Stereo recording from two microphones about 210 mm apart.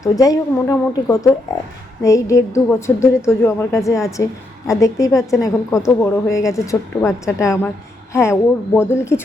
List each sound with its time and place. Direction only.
0.0 s a woman's voice: 15° left (ahead or behind)